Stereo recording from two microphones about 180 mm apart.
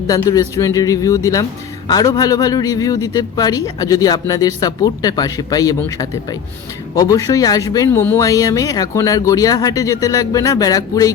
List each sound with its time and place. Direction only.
0.1 s a man's voice: 20° left (ahead or behind)